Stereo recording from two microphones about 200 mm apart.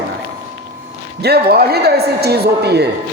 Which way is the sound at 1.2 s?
50° right (ahead or behind).